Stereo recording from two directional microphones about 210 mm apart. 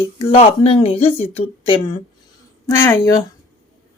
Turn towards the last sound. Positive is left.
turn(degrees=15)  # may be behind; listen again after turning